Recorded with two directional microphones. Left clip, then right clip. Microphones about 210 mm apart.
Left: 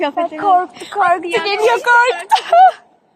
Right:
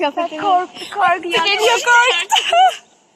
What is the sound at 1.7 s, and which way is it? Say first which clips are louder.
Speech: left 2 dB; 25° left (ahead or behind).